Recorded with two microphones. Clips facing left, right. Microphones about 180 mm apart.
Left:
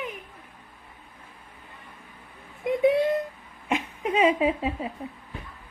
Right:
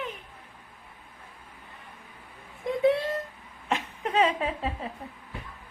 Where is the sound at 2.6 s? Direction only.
20° left (ahead or behind).